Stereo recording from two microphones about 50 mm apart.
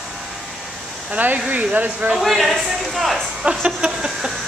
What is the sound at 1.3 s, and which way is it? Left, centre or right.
Speech, right.